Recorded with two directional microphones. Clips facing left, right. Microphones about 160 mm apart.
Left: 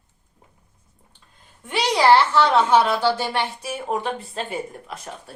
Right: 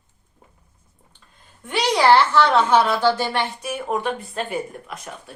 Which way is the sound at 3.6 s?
30° left (ahead or behind).